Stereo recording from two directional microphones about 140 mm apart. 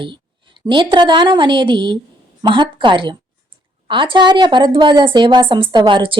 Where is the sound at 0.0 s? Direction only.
35° right (ahead or behind).